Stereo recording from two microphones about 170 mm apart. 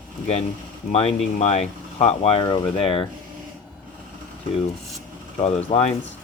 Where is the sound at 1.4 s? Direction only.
40° left (ahead or behind).